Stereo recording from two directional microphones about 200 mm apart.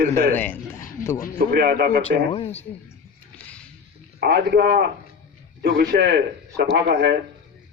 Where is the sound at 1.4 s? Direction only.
50° right (ahead or behind).